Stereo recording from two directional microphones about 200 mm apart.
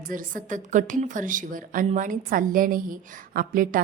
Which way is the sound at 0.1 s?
45° right (ahead or behind).